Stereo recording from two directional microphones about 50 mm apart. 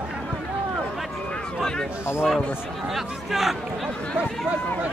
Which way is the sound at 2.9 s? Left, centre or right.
Centre.